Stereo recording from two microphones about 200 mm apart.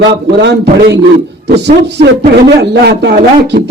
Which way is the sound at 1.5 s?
55° right (ahead or behind).